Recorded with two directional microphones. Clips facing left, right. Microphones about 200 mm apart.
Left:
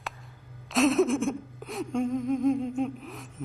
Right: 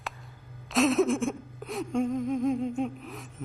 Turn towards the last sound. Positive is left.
turn(degrees=0)  # may be behind; listen again after turning